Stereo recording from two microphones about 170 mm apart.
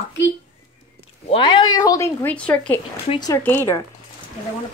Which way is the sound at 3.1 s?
25° left (ahead or behind).